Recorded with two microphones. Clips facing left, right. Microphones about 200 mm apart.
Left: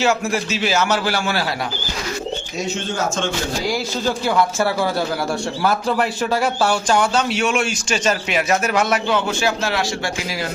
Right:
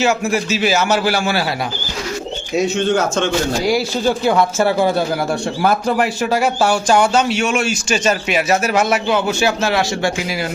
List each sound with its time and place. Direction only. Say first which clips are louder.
0.0 s a man's voice: right 2 dB; 15° right (ahead or behind)
3.7 s speech: right 5 dB; 15° right (ahead or behind)
5.6 s a man's voice: right 3 dB; 10° right (ahead or behind)